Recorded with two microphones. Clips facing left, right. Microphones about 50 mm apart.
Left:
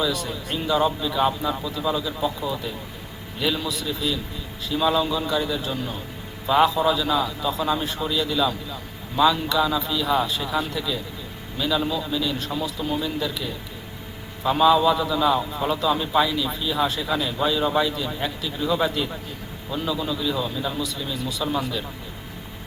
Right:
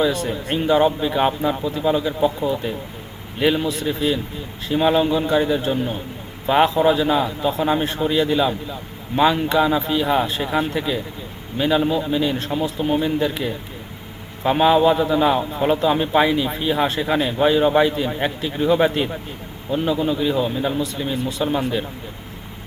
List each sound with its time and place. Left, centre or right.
0.0 s a man's voice: right